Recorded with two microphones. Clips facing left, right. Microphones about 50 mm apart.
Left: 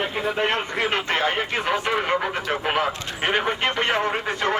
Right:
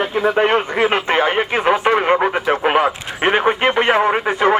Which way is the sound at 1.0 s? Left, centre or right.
Right.